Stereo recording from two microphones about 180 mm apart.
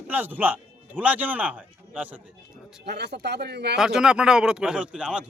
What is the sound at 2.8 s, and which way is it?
Speech, 65° right (ahead or behind).